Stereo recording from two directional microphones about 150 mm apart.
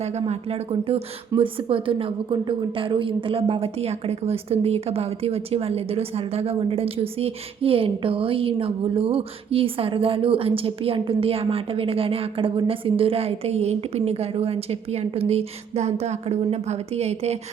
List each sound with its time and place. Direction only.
0.0 s a woman's voice: 45° right (ahead or behind)